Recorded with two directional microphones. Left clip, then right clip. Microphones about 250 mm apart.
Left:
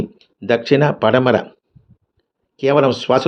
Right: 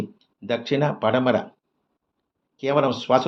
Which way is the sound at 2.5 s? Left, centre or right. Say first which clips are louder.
Left 7 dB; left.